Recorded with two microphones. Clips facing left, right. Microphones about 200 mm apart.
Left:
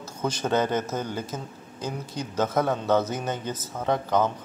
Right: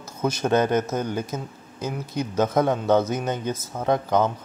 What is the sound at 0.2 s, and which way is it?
Speech, 10° right (ahead or behind).